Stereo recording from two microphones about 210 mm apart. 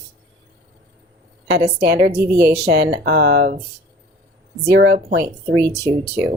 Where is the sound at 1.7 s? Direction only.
50° right (ahead or behind).